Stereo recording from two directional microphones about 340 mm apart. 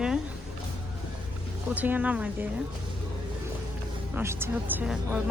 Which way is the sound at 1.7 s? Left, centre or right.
Centre.